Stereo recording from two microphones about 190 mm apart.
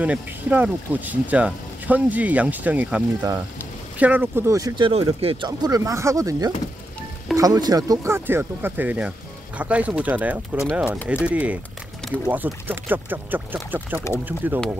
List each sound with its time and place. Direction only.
0.0 s speech: 5° right (ahead or behind)